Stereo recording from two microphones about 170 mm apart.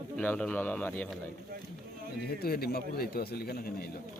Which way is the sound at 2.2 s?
65° left (ahead or behind).